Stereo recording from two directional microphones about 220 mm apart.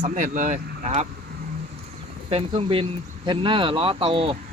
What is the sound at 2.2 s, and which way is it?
Speech, 25° right (ahead or behind).